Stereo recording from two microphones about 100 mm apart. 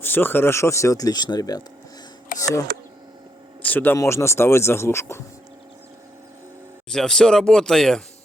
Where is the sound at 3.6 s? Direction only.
15° left (ahead or behind).